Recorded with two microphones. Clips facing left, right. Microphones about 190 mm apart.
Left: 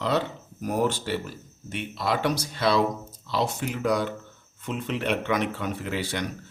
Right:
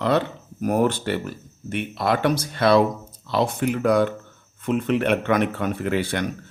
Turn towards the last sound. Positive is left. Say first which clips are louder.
# right 6 dB
turn(degrees=-55)  # may be behind; listen again after turning